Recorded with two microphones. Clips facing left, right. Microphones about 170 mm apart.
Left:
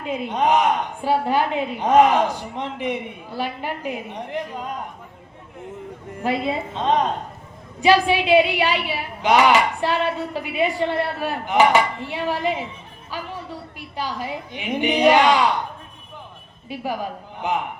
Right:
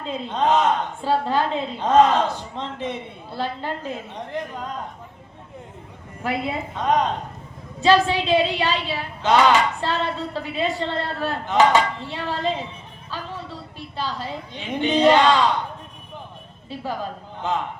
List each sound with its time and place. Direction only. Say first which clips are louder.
0.0 s a woman's voice: left 1 dB; 15° left (ahead or behind)
6.2 s a woman's voice: left 3 dB; 25° left (ahead or behind)
16.6 s a woman's voice: left 2 dB; 15° left (ahead or behind)